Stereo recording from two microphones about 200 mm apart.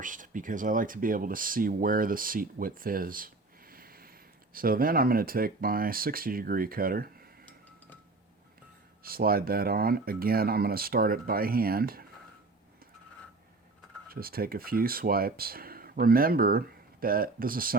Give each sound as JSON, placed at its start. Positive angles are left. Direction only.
{"t": 0.0, "sound": "speech", "side_deg": -40}
{"t": 9.0, "sound": "speech", "side_deg": -50}
{"t": 14.1, "sound": "speech", "side_deg": -50}